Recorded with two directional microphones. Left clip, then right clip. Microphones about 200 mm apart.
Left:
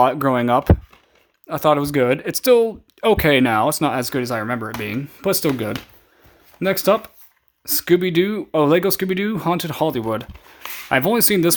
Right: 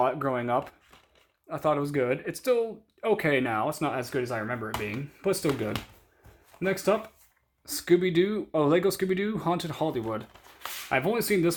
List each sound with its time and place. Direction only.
0.0 s speech: 45° left (ahead or behind)
7.6 s speech: 40° left (ahead or behind)